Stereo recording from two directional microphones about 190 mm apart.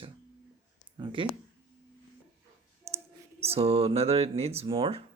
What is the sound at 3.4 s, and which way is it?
Speech, 30° right (ahead or behind).